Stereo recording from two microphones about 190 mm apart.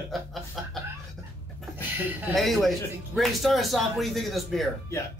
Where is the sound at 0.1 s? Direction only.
Centre (ahead or behind).